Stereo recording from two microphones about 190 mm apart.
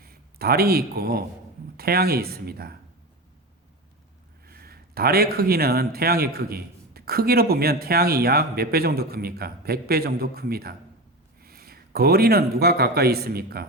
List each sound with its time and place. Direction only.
0.0 s speech: 55° right (ahead or behind)
4.4 s speech: 55° right (ahead or behind)